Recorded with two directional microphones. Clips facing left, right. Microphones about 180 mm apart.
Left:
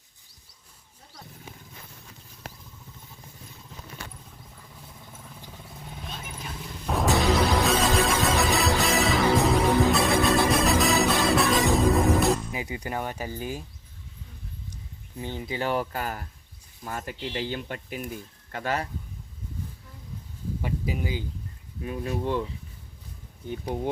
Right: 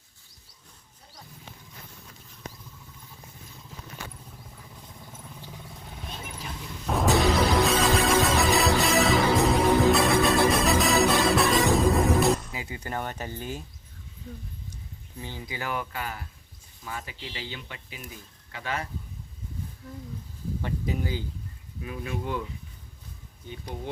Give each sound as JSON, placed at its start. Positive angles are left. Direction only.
{"t": 6.8, "sound": "music", "side_deg": 0}
{"t": 12.5, "sound": "speech", "side_deg": 20}
{"t": 15.2, "sound": "speech", "side_deg": 20}
{"t": 20.6, "sound": "a sound", "side_deg": 10}
{"t": 21.8, "sound": "speech", "side_deg": 35}
{"t": 23.5, "sound": "speech", "side_deg": 55}